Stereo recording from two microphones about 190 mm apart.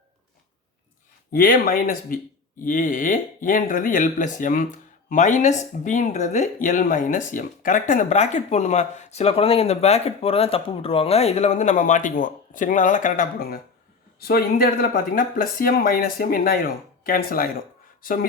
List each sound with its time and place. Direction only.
1.3 s speech: 50° left (ahead or behind)